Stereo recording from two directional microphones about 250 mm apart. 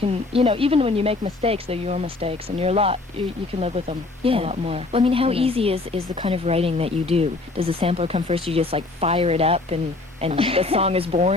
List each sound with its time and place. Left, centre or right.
0.0 s speech: right